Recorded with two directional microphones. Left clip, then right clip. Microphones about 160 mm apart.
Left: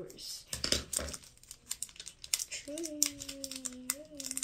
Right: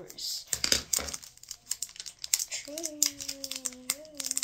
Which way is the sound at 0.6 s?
25° right (ahead or behind).